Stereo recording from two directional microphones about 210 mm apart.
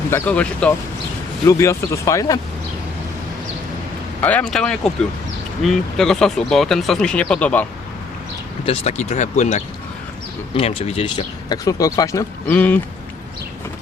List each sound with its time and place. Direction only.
0.1 s speech: 5° left (ahead or behind)
4.2 s speech: 5° left (ahead or behind)
8.6 s speech: 30° left (ahead or behind); by 12.8 s 10° left (ahead or behind)